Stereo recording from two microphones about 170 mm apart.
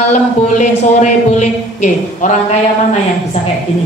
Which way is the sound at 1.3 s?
45° left (ahead or behind).